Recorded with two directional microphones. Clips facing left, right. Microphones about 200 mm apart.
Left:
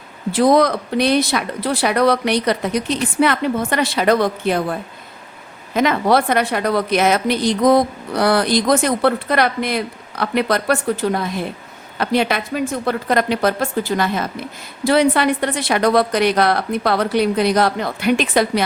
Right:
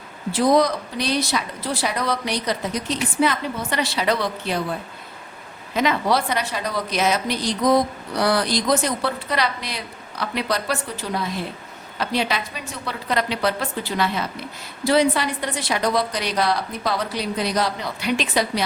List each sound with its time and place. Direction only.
0.3 s a woman's voice: 60° left (ahead or behind)
5.7 s a woman's voice: 50° left (ahead or behind)
14.8 s a woman's voice: 60° left (ahead or behind)